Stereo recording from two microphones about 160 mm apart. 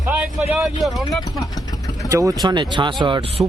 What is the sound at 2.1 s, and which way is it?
Speech, 20° right (ahead or behind).